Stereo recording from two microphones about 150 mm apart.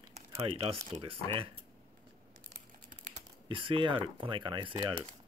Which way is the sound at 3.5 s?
35° right (ahead or behind).